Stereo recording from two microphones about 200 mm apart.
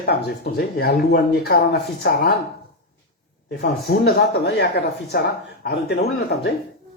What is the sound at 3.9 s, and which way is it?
Speech, 50° left (ahead or behind).